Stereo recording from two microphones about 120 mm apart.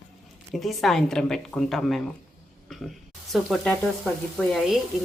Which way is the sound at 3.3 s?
Centre (ahead or behind).